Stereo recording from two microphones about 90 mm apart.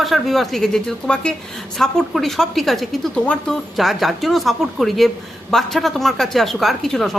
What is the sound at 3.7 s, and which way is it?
A woman's voice, centre (ahead or behind).